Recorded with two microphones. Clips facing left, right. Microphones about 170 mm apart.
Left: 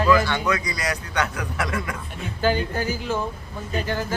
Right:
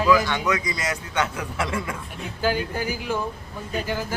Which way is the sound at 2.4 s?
10° right (ahead or behind).